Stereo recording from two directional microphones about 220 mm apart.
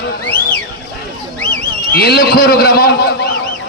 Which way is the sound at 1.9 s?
45° left (ahead or behind).